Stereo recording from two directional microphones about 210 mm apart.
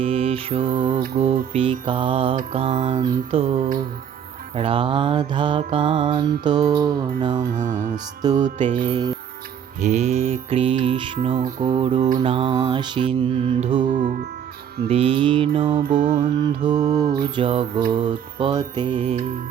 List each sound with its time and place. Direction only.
0.0 s mantra: 25° right (ahead or behind)
0.9 s mantra: 40° right (ahead or behind)
1.2 s mantra: 25° right (ahead or behind)
7.5 s mantra: 35° right (ahead or behind)
7.8 s mantra: 20° right (ahead or behind)
9.8 s mantra: 30° right (ahead or behind)
13.8 s mantra: 35° right (ahead or behind)
14.8 s mantra: 25° right (ahead or behind)